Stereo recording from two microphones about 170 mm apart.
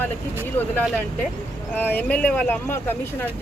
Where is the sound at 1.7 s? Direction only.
10° left (ahead or behind).